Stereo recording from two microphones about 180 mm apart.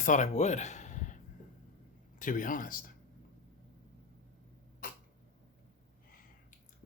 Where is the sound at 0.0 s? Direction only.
45° left (ahead or behind).